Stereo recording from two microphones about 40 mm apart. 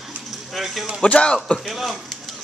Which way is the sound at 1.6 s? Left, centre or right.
Centre.